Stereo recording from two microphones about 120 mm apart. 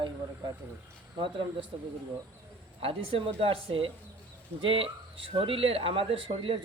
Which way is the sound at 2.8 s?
50° right (ahead or behind).